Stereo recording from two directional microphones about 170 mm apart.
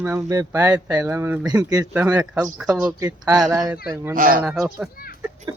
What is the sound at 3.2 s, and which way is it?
Speech, 20° right (ahead or behind).